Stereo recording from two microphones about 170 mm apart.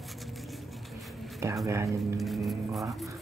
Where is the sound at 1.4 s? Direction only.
15° right (ahead or behind).